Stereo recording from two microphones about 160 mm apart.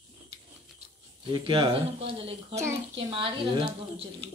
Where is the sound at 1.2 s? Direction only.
35° right (ahead or behind).